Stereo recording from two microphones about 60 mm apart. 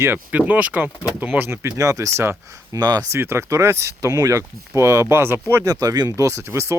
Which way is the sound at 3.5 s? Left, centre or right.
Right.